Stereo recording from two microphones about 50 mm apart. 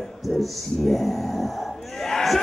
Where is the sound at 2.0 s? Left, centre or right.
Centre.